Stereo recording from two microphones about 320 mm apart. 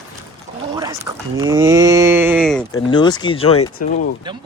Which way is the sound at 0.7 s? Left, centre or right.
Centre.